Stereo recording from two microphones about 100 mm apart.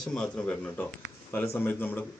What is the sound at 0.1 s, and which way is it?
Speech, 10° left (ahead or behind).